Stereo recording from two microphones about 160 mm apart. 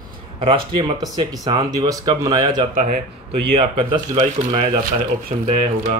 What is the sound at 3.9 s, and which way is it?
Speech, 35° right (ahead or behind).